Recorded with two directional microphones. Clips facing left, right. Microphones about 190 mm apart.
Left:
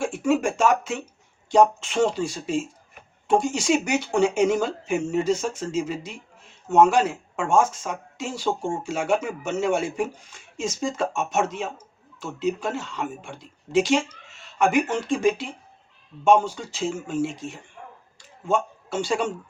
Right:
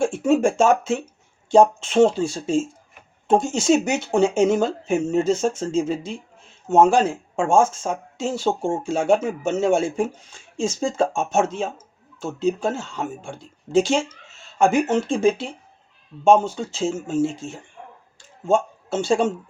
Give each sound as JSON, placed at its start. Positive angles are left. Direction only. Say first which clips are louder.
{"t": 0.0, "sound": "speech", "louder": "right 4 dB", "side_deg": -25}